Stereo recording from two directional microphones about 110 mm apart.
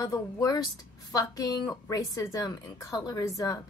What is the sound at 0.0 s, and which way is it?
A woman's voice, 35° left (ahead or behind).